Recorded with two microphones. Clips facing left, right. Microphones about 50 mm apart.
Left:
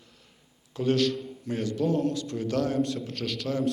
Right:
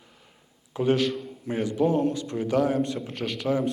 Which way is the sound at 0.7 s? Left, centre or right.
Centre.